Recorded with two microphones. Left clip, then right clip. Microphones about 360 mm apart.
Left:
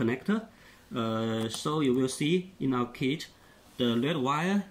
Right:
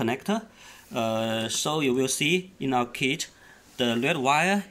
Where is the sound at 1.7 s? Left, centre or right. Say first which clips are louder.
Right 2 dB; centre.